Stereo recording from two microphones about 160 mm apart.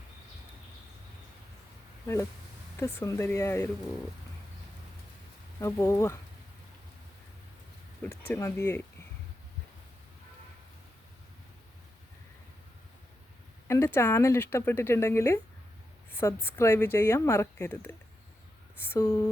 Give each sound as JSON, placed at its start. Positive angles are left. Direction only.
{"t": 2.7, "sound": "a woman's voice", "side_deg": 15}
{"t": 5.5, "sound": "a woman's voice", "side_deg": 15}
{"t": 8.0, "sound": "a woman's voice", "side_deg": 15}
{"t": 13.7, "sound": "a woman's voice", "side_deg": 15}